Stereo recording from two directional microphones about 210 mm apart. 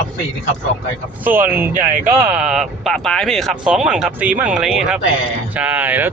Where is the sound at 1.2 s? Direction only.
10° right (ahead or behind).